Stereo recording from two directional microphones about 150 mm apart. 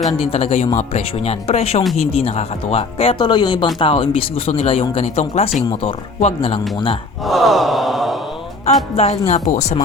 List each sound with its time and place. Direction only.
0.2 s speech: 40° left (ahead or behind)
7.3 s sigh: centre (ahead or behind)
8.6 s speech: 45° left (ahead or behind)